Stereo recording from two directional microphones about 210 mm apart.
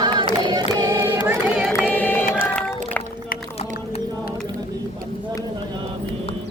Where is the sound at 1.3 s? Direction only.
5° right (ahead or behind).